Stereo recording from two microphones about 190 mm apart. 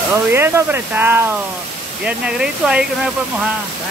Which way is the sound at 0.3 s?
10° right (ahead or behind).